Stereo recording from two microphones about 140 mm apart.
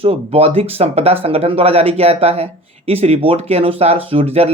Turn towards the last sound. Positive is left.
turn(degrees=-45)  # may be behind; listen again after turning